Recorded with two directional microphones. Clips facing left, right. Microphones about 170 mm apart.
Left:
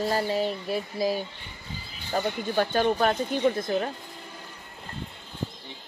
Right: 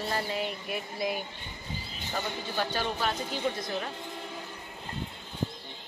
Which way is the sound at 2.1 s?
50° left (ahead or behind).